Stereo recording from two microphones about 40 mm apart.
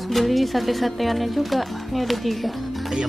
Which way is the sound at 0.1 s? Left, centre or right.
Centre.